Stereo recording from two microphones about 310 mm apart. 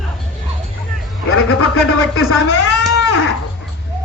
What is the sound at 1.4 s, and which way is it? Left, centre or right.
Speech, left.